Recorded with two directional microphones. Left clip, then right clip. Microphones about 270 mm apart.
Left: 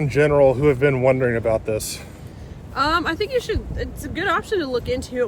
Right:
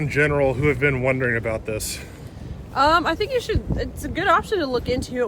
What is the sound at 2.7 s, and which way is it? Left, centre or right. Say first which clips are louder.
Speech: right 2 dB; centre.